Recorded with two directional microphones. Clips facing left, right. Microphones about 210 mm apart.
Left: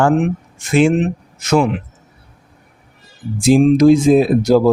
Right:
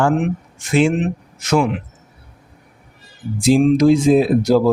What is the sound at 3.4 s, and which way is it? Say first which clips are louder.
Speech: left 2 dB; 50° left (ahead or behind).